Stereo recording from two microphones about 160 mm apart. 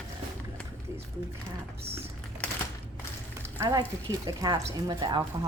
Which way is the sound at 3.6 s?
15° right (ahead or behind).